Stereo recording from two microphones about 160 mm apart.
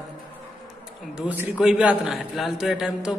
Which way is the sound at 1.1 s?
5° right (ahead or behind).